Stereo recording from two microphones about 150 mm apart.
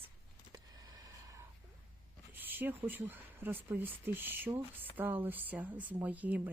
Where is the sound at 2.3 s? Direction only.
15° right (ahead or behind).